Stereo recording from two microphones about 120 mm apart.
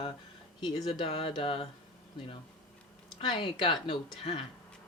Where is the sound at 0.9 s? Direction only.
45° left (ahead or behind).